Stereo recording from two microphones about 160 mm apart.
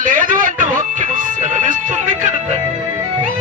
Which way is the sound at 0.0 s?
55° right (ahead or behind).